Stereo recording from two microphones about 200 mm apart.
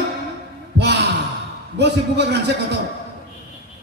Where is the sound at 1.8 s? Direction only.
55° right (ahead or behind).